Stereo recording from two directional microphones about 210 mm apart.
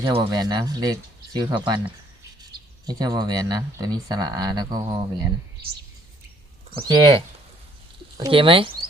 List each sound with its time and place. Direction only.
0.0 s speech: 20° right (ahead or behind)
2.8 s speech: 20° right (ahead or behind)
6.7 s speech: 20° right (ahead or behind)
8.2 s speech: 25° right (ahead or behind)